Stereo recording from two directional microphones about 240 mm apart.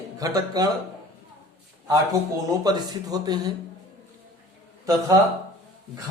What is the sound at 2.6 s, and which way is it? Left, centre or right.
Speech, centre.